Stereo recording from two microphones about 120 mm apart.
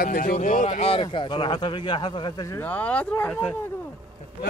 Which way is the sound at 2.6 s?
15° left (ahead or behind).